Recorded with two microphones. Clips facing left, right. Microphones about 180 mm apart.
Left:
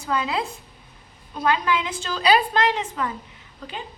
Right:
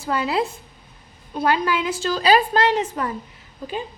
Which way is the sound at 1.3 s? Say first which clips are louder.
Right 2 dB; 40° right (ahead or behind).